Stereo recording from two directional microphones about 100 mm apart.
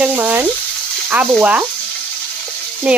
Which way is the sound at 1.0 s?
15° right (ahead or behind).